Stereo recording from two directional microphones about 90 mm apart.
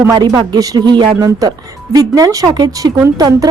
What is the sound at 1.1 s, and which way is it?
A woman's voice, 40° right (ahead or behind).